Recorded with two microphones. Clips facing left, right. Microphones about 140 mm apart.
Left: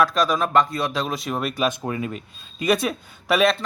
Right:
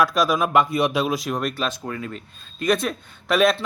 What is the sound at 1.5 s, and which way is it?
Speech, 15° left (ahead or behind).